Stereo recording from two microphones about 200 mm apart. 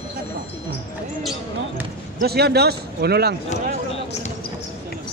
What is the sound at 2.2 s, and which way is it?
A man's voice, 55° right (ahead or behind).